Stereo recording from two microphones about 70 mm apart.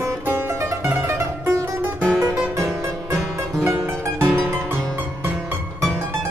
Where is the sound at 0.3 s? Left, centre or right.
Right.